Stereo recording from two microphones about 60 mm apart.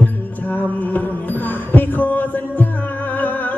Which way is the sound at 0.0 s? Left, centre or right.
Left.